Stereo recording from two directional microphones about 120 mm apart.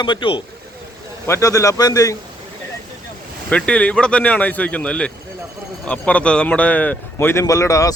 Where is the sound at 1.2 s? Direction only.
25° left (ahead or behind).